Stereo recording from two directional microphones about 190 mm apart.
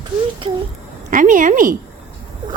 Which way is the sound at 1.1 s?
45° right (ahead or behind).